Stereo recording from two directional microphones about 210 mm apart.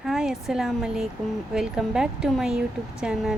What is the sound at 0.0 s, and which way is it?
Speech, centre (ahead or behind).